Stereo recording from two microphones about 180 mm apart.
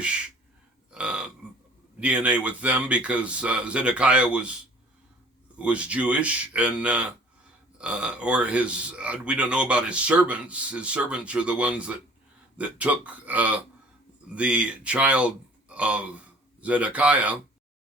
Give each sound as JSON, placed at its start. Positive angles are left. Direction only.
{"t": 0.9, "sound": "burping", "side_deg": -5}
{"t": 2.0, "sound": "a man's voice", "side_deg": -5}
{"t": 5.5, "sound": "a man's voice", "side_deg": -5}